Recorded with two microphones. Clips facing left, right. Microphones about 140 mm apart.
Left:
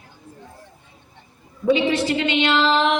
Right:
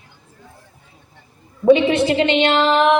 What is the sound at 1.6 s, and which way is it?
Speech, 55° right (ahead or behind).